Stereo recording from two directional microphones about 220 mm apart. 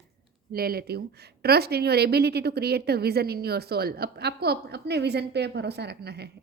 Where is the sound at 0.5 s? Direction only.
45° right (ahead or behind).